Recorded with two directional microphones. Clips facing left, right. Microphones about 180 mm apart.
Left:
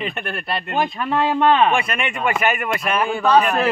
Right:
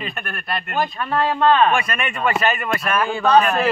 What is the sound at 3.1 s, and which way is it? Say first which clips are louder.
Speech: right 1 dB; 5° left (ahead or behind).